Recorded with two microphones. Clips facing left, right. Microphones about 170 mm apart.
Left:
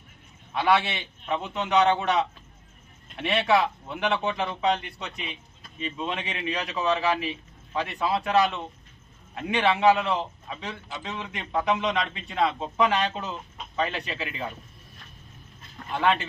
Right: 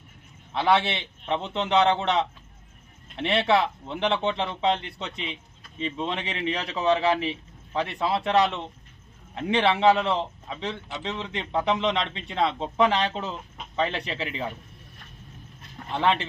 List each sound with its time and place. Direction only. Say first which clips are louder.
0.5 s speech: right 1 dB; 25° right (ahead or behind)
3.2 s speech: right 1 dB; 30° right (ahead or behind)
15.9 s speech: even; 25° right (ahead or behind)